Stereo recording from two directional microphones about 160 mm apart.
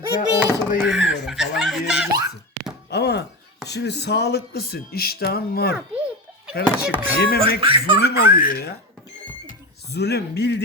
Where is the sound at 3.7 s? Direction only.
90° left; by 5.7 s 75° left (ahead or behind).